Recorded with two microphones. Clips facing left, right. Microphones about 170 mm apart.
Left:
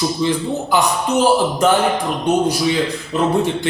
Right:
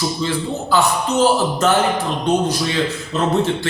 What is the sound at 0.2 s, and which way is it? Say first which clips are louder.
A man's voice: left 3 dB; 15° left (ahead or behind).